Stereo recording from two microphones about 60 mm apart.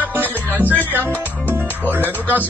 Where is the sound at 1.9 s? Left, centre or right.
Right.